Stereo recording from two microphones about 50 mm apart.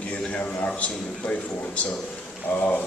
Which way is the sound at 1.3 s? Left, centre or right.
Left.